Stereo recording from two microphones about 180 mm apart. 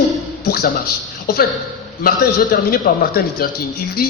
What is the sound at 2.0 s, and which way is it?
A man's voice, 55° left (ahead or behind).